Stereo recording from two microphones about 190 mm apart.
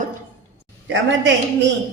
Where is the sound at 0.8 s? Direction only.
70° right (ahead or behind).